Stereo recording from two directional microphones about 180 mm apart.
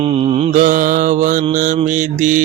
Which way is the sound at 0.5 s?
45° right (ahead or behind).